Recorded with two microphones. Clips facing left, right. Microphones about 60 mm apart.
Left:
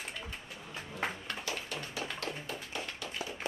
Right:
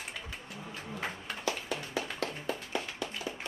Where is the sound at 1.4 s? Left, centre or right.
Right.